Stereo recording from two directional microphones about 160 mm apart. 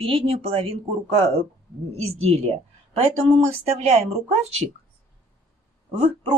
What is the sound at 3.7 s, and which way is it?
Speech, 40° right (ahead or behind).